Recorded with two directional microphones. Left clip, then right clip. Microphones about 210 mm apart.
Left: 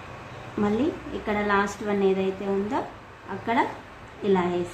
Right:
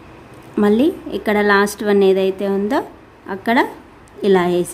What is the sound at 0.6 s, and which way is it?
A woman's voice, 55° right (ahead or behind).